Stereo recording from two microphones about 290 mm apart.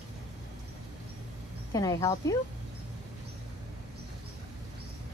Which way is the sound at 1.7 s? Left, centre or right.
Centre.